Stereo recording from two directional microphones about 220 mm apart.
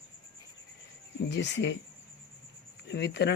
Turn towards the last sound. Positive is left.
turn(degrees=50)  # may be behind; listen again after turning